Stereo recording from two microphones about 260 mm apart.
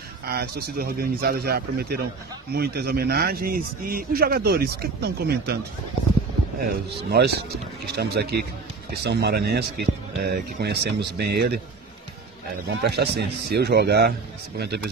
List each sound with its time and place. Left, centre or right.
0.2 s a man's voice: right
6.6 s a man's voice: right
12.8 s a man's voice: right